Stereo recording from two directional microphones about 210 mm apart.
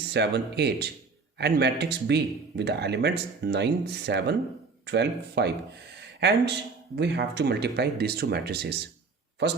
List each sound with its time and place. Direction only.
0.1 s speech: 55° right (ahead or behind)